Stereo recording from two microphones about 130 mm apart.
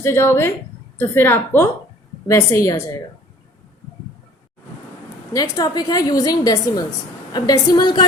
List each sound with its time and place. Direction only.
0.0 s a woman's voice: 20° left (ahead or behind)
5.3 s a woman's voice: 30° left (ahead or behind)